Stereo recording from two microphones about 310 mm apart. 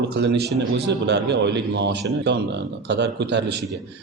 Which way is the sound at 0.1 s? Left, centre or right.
Right.